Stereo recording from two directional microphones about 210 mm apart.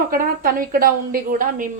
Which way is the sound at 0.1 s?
45° right (ahead or behind).